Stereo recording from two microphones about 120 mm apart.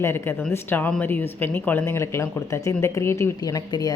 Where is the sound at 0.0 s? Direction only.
20° left (ahead or behind).